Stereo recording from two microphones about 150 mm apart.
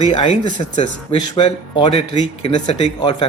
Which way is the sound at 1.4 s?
35° left (ahead or behind).